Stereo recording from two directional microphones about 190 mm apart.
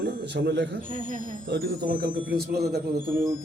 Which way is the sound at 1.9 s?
50° right (ahead or behind).